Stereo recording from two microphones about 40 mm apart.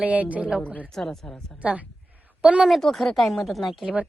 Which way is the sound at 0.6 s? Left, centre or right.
Left.